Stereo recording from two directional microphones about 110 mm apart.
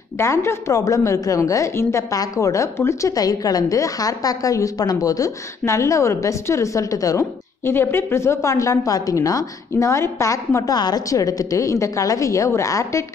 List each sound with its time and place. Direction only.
0.2 s a woman's voice: 25° left (ahead or behind)